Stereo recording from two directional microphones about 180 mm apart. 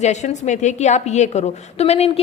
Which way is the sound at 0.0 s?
40° left (ahead or behind).